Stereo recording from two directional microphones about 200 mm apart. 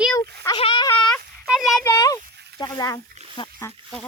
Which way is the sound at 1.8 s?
15° left (ahead or behind).